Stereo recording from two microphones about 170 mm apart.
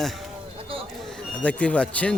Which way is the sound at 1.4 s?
10° left (ahead or behind).